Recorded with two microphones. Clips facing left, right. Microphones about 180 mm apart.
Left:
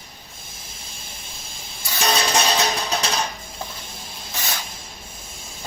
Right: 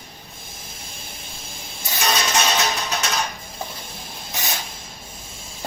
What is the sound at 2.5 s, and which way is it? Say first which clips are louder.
Music: left 1 dB; 30° left (ahead or behind).